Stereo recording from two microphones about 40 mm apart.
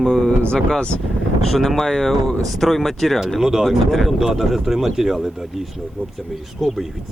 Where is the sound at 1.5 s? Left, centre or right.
Centre.